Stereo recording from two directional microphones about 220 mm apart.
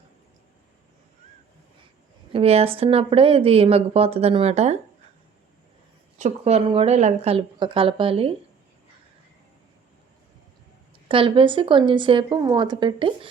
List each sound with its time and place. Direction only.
2.3 s a woman's voice: 25° right (ahead or behind)
6.1 s a woman's voice: 30° right (ahead or behind)
11.1 s a woman's voice: 25° right (ahead or behind)